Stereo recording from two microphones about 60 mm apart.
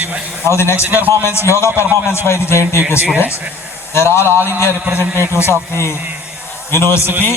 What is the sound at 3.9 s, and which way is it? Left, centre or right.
A man's voice, left.